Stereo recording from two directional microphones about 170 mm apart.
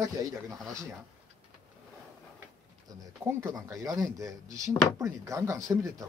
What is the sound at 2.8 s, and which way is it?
Speech, 20° right (ahead or behind).